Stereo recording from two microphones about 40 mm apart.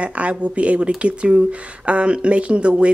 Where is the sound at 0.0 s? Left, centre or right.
Right.